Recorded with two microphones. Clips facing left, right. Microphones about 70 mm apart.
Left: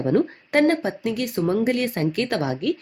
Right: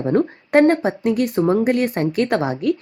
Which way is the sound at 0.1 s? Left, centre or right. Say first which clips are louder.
Right 4 dB; right.